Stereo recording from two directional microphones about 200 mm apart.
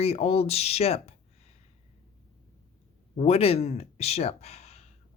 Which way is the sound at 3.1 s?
30° left (ahead or behind).